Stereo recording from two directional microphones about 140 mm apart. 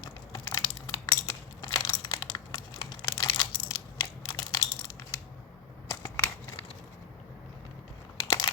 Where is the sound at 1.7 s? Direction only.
30° left (ahead or behind).